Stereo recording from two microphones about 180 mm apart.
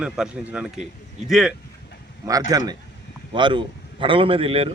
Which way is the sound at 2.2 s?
20° right (ahead or behind).